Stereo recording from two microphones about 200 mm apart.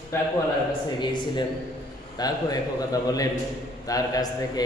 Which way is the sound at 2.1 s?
20° left (ahead or behind).